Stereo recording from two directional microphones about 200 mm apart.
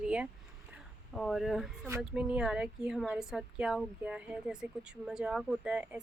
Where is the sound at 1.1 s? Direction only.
Centre (ahead or behind).